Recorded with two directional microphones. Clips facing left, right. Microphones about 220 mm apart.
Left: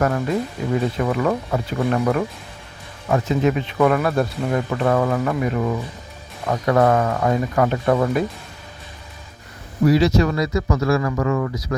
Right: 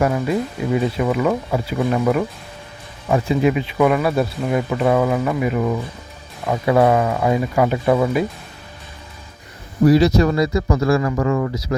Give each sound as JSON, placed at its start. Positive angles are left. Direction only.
{"t": 0.0, "sound": "speech", "side_deg": -10}
{"t": 9.8, "sound": "speech", "side_deg": -35}